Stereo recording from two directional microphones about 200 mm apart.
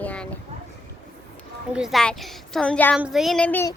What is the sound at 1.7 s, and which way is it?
A child's voice, centre (ahead or behind).